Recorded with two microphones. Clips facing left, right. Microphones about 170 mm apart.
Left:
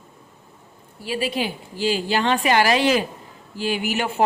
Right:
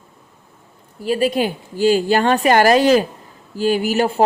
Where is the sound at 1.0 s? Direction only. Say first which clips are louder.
Right 7 dB; 45° right (ahead or behind).